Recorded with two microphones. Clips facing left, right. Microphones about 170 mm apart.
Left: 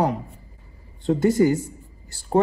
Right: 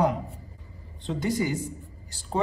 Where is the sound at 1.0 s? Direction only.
55° left (ahead or behind).